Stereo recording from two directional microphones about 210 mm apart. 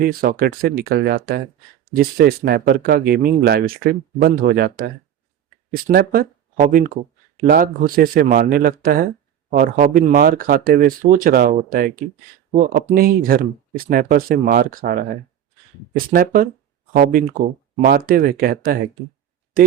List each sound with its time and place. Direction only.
0.0 s speech: 45° right (ahead or behind)
12.9 s speech: 45° right (ahead or behind)